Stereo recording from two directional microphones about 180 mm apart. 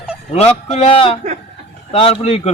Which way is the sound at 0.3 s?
35° left (ahead or behind).